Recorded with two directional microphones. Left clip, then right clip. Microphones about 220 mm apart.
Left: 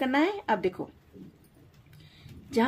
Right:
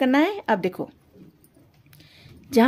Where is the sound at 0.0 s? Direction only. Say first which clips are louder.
Right 6 dB; 55° right (ahead or behind).